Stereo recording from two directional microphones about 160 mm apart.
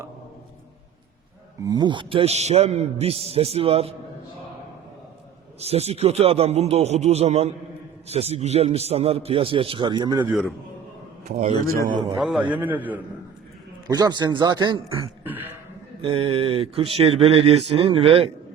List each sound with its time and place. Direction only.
1.6 s speech: 25° right (ahead or behind)
5.5 s speech: 40° right (ahead or behind)
10.2 s a man's voice: centre (ahead or behind)
11.3 s speech: 40° right (ahead or behind)
12.2 s a man's voice: 5° right (ahead or behind)
13.8 s speech: 25° right (ahead or behind)
15.2 s throat clearing: 10° right (ahead or behind)
16.0 s speech: 35° right (ahead or behind)